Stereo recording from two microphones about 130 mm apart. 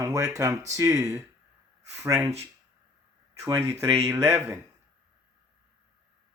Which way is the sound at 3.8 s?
20° right (ahead or behind).